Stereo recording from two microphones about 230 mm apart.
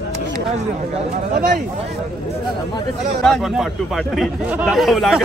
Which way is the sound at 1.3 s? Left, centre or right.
Right.